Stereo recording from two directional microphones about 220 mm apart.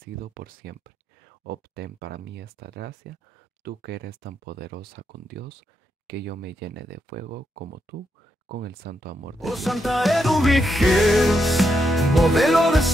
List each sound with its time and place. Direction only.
0.0 s speech: 40° right (ahead or behind)
9.4 s music: centre (ahead or behind)